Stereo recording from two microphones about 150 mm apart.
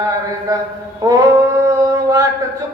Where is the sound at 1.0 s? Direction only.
15° right (ahead or behind).